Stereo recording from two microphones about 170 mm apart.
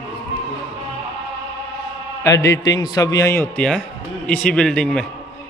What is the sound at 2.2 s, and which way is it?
A man's voice, 15° left (ahead or behind).